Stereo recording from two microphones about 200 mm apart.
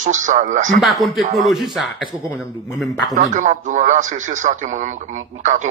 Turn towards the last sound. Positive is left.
turn(degrees=-40)  # may be behind; listen again after turning